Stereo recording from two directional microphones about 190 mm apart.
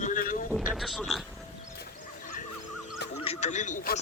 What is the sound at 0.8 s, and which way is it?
Speech, centre (ahead or behind).